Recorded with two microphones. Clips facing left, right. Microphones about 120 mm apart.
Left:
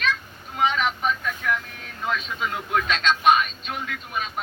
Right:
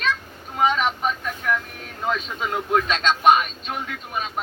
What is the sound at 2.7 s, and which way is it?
Speech, 30° right (ahead or behind).